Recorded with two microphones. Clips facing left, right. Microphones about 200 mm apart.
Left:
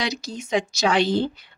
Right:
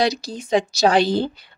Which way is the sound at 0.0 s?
35° right (ahead or behind).